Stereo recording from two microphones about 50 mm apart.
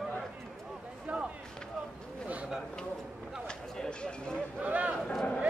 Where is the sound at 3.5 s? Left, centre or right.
Centre.